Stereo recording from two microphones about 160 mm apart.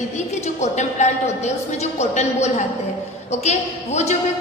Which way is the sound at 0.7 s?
45° left (ahead or behind).